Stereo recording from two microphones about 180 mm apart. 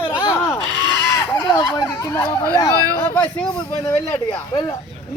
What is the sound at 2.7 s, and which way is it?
Speech, 20° right (ahead or behind).